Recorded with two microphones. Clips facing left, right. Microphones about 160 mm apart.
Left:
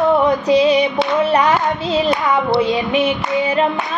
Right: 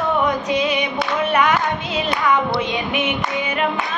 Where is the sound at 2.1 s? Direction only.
35° left (ahead or behind).